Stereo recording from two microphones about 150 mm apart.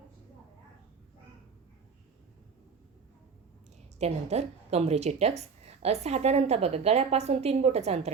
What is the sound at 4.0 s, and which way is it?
A woman's voice, 45° right (ahead or behind).